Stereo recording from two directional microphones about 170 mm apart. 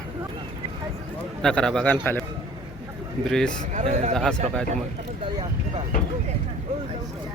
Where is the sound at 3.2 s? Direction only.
5° left (ahead or behind).